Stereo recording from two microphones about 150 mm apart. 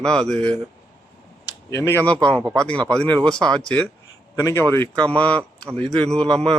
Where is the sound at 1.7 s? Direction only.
20° left (ahead or behind).